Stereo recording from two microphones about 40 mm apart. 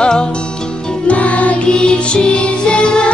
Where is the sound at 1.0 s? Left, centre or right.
Left.